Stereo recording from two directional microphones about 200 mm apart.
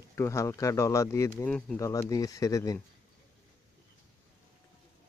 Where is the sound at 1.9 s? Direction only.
15° left (ahead or behind).